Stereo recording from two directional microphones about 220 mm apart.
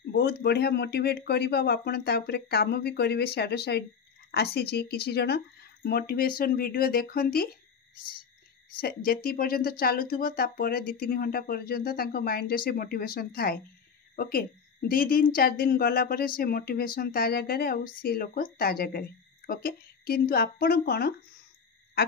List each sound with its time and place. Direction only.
0.0 s a woman's voice: 45° left (ahead or behind)
8.7 s a woman's voice: 40° left (ahead or behind)